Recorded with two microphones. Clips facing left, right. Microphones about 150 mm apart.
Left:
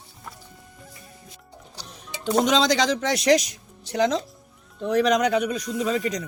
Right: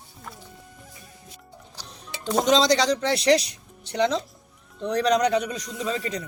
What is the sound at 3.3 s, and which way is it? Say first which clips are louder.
Speech: left 1 dB; 30° right (ahead or behind).